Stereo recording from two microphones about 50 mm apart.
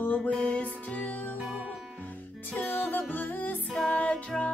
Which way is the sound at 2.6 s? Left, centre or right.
Left.